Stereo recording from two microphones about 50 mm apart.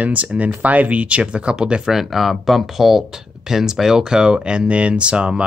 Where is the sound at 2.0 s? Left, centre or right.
Centre.